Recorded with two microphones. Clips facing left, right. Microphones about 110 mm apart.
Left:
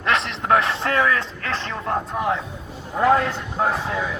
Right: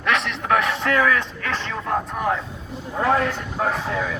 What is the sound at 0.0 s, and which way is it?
A man's voice, 30° left (ahead or behind).